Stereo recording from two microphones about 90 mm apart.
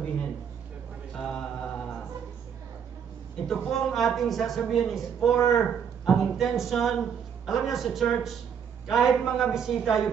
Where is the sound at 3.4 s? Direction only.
5° left (ahead or behind).